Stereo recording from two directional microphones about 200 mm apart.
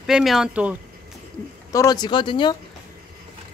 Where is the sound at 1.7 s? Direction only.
20° left (ahead or behind).